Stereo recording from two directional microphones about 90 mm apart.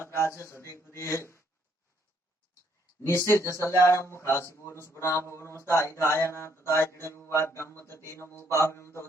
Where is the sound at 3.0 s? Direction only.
30° left (ahead or behind).